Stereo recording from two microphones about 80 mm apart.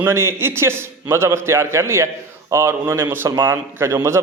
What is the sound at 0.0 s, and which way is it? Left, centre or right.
Speech, right.